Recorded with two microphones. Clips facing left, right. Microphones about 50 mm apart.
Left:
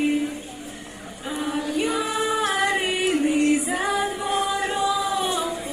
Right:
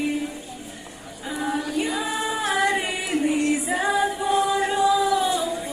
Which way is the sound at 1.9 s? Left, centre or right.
Left.